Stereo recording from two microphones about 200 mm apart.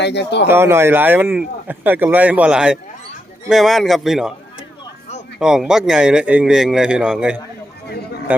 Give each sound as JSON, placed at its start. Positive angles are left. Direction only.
{"t": 0.0, "sound": "speech", "side_deg": 60}
{"t": 0.4, "sound": "speech", "side_deg": -10}
{"t": 5.4, "sound": "speech", "side_deg": -5}